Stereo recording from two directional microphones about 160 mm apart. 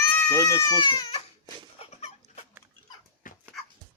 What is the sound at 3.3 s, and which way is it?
Dog, 60° left (ahead or behind).